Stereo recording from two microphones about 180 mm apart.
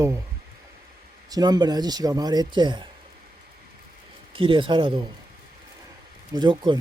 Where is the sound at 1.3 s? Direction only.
20° right (ahead or behind).